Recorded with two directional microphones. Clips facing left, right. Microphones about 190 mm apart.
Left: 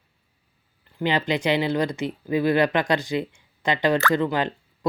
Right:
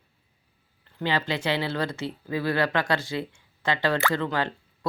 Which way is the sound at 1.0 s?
20° left (ahead or behind).